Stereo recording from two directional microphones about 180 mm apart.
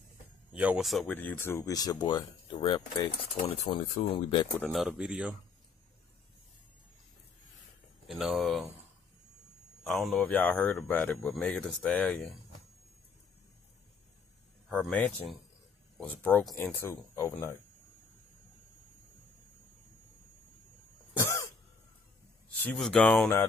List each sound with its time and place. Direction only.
0.5 s speech: 5° right (ahead or behind); by 4.5 s 30° left (ahead or behind)
4.6 s speech: centre (ahead or behind)
8.1 s speech: centre (ahead or behind)
9.8 s speech: centre (ahead or behind)
14.7 s speech: 5° left (ahead or behind)
21.2 s cough: 15° left (ahead or behind)
22.6 s speech: 5° left (ahead or behind)